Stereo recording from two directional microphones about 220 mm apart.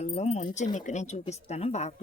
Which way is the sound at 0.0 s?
30° left (ahead or behind).